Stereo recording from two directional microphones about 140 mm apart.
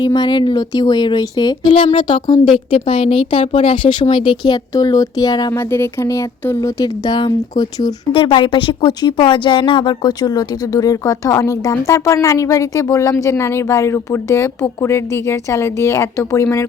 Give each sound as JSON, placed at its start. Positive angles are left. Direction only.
{"t": 0.0, "sound": "speech", "side_deg": 30}
{"t": 5.5, "sound": "speech", "side_deg": 20}